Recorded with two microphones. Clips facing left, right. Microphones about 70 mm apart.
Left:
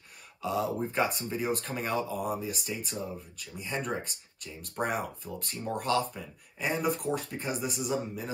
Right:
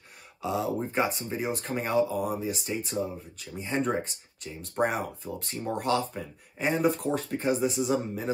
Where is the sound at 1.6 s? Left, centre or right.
Right.